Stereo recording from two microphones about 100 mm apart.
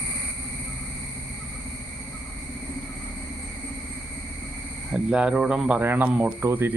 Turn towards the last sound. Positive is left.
turn(degrees=-25)  # may be behind; listen again after turning